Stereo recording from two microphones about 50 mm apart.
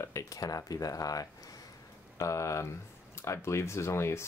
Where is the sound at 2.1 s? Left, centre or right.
Left.